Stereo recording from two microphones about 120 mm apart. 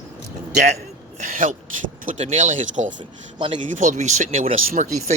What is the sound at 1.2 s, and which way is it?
Speech, 90° right.